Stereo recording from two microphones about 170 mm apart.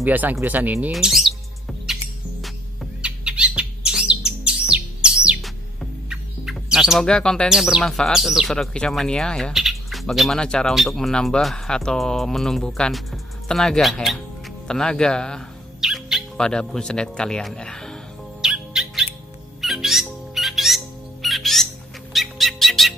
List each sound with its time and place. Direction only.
0.0 s speech: 10° right (ahead or behind)
0.8 s music: 5° right (ahead or behind)
2.4 s bird: 5° right (ahead or behind)
14.7 s speech: 5° left (ahead or behind)
18.4 s music: 5° right (ahead or behind)
19.6 s bird: centre (ahead or behind)
22.1 s music: centre (ahead or behind)